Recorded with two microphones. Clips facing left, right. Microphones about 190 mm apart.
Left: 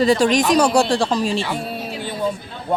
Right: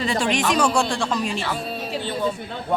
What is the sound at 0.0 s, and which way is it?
Speech, 40° left (ahead or behind).